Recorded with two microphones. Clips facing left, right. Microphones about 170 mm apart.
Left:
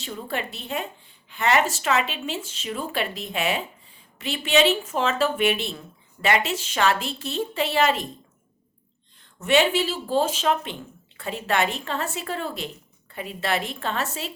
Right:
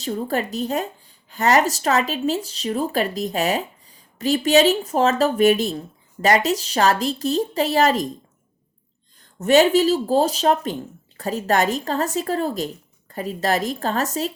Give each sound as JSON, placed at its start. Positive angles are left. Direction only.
{"t": 0.0, "sound": "a woman's voice", "side_deg": -40}
{"t": 9.2, "sound": "a woman's voice", "side_deg": -40}